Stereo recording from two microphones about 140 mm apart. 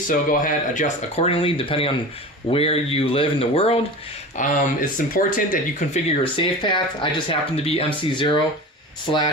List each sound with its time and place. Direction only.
0.1 s speech: 70° left (ahead or behind); by 3.8 s 45° left (ahead or behind)
4.4 s speech: 65° left (ahead or behind)
6.1 s speech: 35° left (ahead or behind)